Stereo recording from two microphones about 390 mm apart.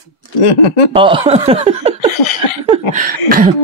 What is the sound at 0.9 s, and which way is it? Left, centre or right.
Speech, centre.